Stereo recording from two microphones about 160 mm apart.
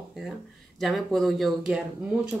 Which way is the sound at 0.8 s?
Centre (ahead or behind).